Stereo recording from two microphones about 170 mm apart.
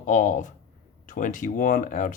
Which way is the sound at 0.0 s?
50° left (ahead or behind).